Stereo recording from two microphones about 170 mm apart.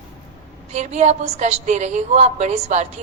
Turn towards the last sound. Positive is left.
turn(degrees=-40)  # may be behind; listen again after turning